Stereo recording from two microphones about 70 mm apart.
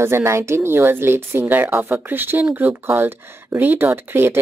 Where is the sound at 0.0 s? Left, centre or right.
Right.